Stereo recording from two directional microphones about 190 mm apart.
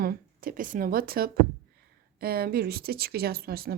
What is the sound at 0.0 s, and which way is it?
Speech, 50° right (ahead or behind).